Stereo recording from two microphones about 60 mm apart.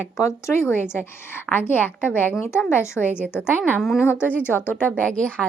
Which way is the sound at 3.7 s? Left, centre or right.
Centre.